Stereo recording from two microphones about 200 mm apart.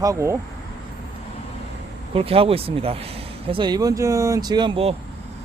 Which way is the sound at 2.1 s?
30° right (ahead or behind).